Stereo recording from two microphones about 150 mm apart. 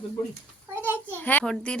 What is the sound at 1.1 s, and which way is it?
Speech, 10° left (ahead or behind).